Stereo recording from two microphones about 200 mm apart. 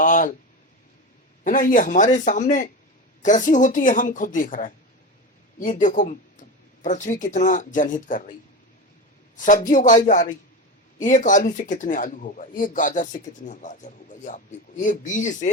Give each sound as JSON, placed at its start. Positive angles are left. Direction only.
{"t": 0.0, "sound": "a sound", "side_deg": 40}
{"t": 1.5, "sound": "speech", "side_deg": 40}
{"t": 9.3, "sound": "speech", "side_deg": 40}